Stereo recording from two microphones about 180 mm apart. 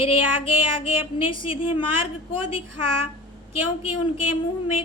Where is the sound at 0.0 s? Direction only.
30° left (ahead or behind).